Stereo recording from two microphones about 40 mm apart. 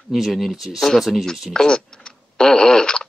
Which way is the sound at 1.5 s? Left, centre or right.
Centre.